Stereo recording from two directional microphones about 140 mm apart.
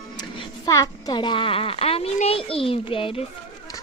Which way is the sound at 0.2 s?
30° left (ahead or behind).